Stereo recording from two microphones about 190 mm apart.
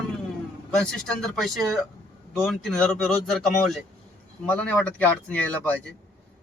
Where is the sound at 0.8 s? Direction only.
Centre (ahead or behind).